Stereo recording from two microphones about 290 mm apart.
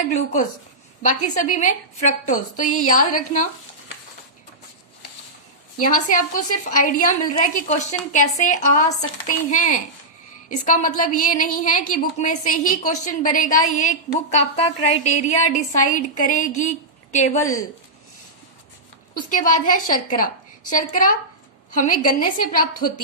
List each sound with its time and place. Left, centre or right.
1.0 s a woman's voice: left
5.7 s a woman's voice: left
19.3 s a woman's voice: left